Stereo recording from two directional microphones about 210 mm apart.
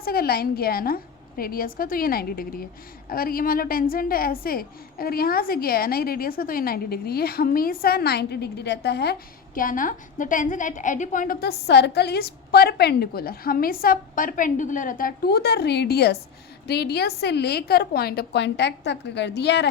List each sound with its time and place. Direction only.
0.0 s a woman's voice: 45° left (ahead or behind)
9.6 s a woman's voice: 40° left (ahead or behind)